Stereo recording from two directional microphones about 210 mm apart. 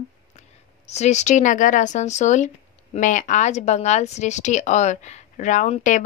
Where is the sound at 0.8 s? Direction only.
30° left (ahead or behind).